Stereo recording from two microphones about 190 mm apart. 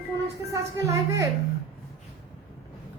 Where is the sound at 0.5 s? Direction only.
15° right (ahead or behind).